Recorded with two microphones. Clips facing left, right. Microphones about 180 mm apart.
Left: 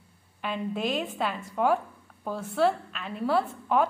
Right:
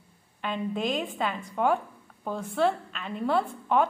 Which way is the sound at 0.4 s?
5° left (ahead or behind).